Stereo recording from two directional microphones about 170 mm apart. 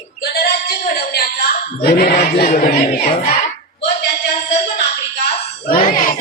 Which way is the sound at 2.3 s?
55° left (ahead or behind).